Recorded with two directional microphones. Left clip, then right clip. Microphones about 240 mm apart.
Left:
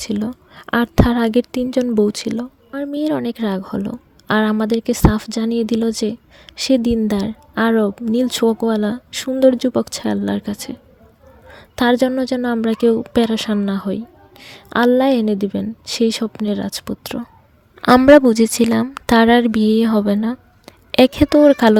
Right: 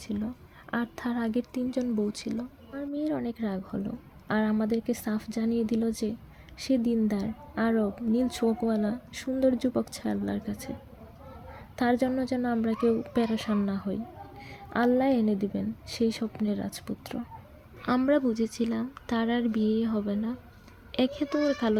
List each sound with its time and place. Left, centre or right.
0.0 s a woman's voice: left
11.8 s a woman's voice: left